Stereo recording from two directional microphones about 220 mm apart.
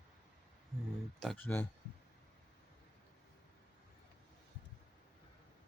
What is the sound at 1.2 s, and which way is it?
Speech, 5° left (ahead or behind).